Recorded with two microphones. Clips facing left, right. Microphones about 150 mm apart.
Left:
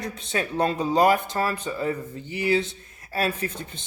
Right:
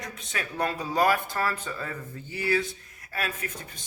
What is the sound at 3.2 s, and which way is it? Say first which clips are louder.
Speech: left 7 dB; 30° left (ahead or behind).